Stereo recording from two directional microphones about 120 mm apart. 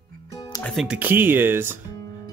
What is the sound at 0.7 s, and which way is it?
Speech, 10° right (ahead or behind).